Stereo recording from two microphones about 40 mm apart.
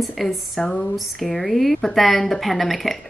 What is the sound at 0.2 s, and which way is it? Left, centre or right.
Speech, centre.